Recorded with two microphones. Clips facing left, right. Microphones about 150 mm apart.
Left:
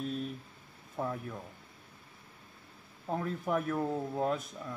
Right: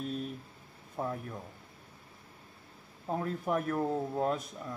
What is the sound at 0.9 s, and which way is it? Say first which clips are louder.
Speech: even; 15° right (ahead or behind).